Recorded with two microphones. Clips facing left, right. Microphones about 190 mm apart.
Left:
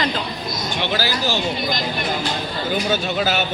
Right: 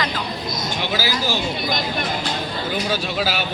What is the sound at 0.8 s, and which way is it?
Speech, 10° right (ahead or behind).